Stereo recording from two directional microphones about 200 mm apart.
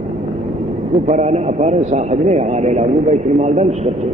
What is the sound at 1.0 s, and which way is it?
A man's voice, 35° right (ahead or behind).